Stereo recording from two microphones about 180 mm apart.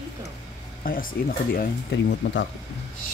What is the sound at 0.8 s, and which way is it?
Speech, 50° left (ahead or behind).